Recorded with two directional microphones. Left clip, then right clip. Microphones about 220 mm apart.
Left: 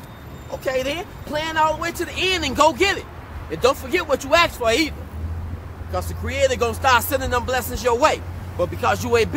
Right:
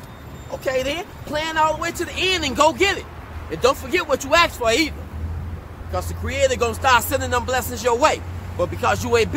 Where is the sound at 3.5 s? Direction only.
Centre (ahead or behind).